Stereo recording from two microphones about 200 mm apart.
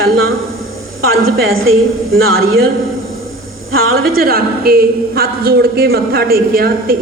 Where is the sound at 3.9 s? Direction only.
50° right (ahead or behind).